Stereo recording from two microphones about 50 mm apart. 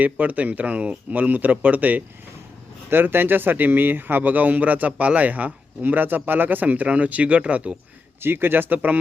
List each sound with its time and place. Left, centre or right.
0.0 s speech: right
2.9 s speech: right
8.2 s speech: right